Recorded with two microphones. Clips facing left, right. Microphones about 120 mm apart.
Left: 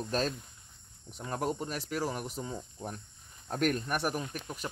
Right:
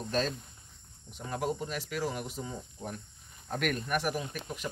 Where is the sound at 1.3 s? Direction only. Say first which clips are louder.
Even; 45° left (ahead or behind).